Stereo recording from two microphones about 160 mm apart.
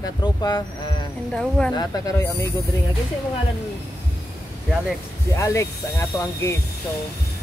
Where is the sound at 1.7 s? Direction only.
25° left (ahead or behind).